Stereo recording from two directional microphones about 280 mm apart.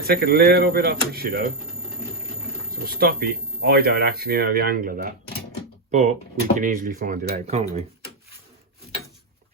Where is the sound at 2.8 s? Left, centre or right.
Right.